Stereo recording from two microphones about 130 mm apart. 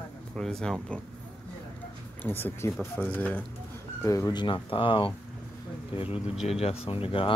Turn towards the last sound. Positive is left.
turn(degrees=45)  # may be behind; listen again after turning